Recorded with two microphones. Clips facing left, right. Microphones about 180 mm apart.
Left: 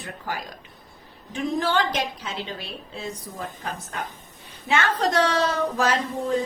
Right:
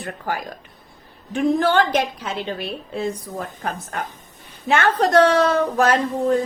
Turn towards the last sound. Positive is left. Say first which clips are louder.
# right 6 dB
turn(degrees=-55)  # may be behind; listen again after turning